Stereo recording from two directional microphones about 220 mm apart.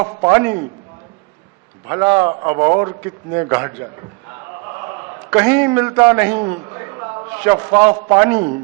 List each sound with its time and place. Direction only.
0.0 s a man's voice: 15° right (ahead or behind)
1.9 s a man's voice: 15° right (ahead or behind)
4.7 s a sound: 20° right (ahead or behind)
6.3 s a man's voice: 25° right (ahead or behind)